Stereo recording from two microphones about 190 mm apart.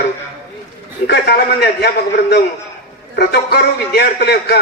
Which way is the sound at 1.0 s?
60° left (ahead or behind).